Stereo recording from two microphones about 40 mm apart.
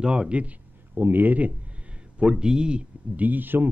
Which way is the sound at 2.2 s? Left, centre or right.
Right.